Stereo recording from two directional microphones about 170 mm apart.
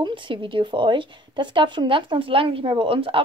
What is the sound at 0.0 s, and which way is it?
Speech, 30° right (ahead or behind).